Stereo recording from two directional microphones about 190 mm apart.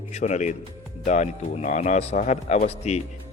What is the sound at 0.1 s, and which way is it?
A man's voice, 35° left (ahead or behind).